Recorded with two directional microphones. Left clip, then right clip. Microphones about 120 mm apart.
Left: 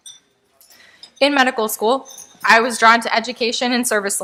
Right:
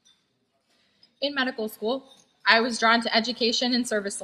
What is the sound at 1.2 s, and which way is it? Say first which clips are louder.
A woman's voice: left 12 dB; 40° left (ahead or behind).